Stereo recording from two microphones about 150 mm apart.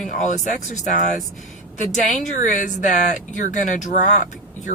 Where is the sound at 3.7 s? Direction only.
55° left (ahead or behind).